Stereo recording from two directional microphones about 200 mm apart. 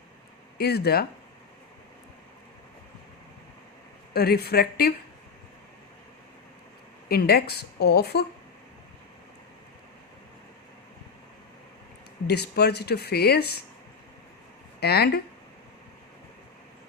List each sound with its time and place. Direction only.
0.6 s speech: 55° left (ahead or behind)
4.1 s speech: 50° left (ahead or behind)
7.1 s speech: 50° left (ahead or behind)
12.3 s speech: 55° left (ahead or behind)
14.8 s speech: 55° left (ahead or behind)